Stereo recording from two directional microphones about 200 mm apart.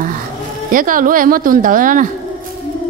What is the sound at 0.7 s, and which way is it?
A woman's voice, 45° right (ahead or behind).